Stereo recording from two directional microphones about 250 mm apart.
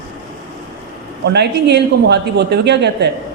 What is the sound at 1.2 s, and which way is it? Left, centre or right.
Speech, right.